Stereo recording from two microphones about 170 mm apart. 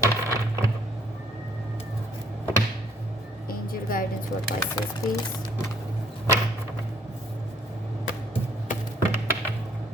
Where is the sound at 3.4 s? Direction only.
55° left (ahead or behind).